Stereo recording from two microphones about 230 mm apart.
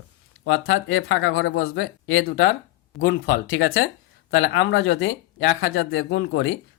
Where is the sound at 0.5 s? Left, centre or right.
Left.